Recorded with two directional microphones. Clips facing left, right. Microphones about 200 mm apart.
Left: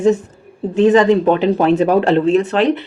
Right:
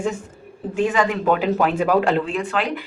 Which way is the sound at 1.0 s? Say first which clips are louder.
Left 7 dB; 25° left (ahead or behind).